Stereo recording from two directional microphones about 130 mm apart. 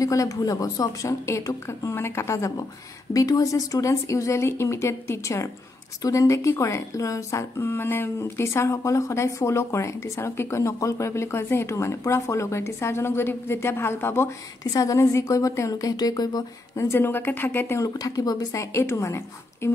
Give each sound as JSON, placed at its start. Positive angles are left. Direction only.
{"t": 0.0, "sound": "speech", "side_deg": 25}
{"t": 16.9, "sound": "speech", "side_deg": 15}